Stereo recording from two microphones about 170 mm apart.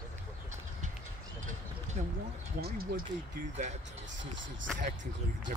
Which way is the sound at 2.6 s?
65° right (ahead or behind).